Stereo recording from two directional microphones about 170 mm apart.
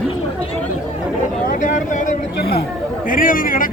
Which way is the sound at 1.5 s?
50° left (ahead or behind).